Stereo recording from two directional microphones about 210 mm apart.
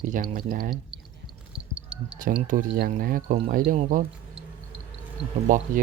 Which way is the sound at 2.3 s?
35° right (ahead or behind).